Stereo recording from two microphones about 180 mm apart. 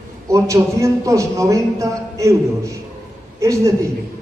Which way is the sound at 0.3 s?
15° right (ahead or behind).